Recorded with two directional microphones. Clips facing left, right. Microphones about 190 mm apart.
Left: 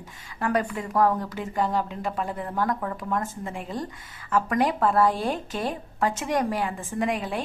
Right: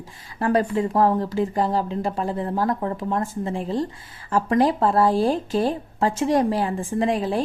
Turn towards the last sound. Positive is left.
turn(degrees=-30)  # may be behind; listen again after turning